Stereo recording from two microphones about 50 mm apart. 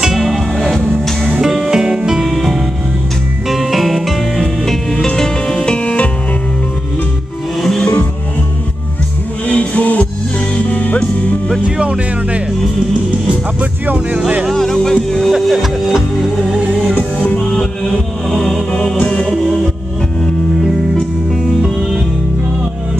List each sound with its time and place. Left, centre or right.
0.0 s music: centre
1.2 s music: centre
5.0 s music: centre
7.6 s music: centre
9.5 s music: left
11.6 s music: right
13.6 s music: right
14.5 s music: centre
15.4 s music: centre
16.9 s music: left
17.4 s music: centre
18.9 s music: centre